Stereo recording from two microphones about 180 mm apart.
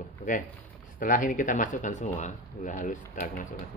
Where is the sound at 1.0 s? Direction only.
45° left (ahead or behind).